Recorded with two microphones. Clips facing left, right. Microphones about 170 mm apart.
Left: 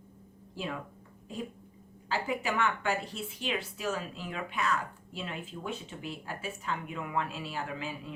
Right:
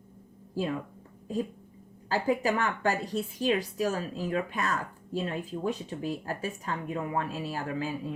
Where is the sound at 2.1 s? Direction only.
40° right (ahead or behind).